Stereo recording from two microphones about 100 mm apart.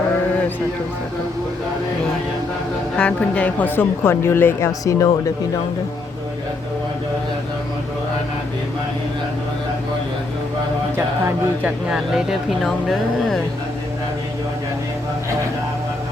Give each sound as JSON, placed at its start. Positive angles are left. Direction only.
{"t": 3.0, "sound": "a woman's voice", "side_deg": 10}
{"t": 11.6, "sound": "speech", "side_deg": -5}